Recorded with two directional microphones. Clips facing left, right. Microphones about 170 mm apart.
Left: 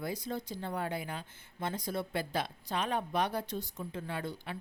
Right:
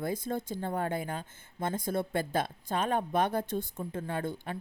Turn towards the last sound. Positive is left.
turn(degrees=-50)  # may be behind; listen again after turning